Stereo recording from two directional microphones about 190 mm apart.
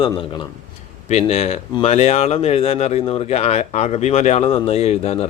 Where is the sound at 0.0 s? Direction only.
25° left (ahead or behind).